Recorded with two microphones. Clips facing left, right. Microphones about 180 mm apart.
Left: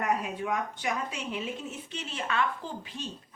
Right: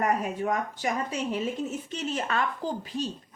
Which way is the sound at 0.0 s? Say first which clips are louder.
Right 3 dB; 45° right (ahead or behind).